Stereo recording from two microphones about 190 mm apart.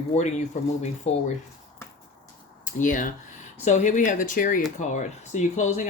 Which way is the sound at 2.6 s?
45° left (ahead or behind).